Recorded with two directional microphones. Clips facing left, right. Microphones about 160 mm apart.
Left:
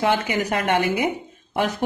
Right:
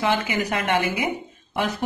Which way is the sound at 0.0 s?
45° left (ahead or behind).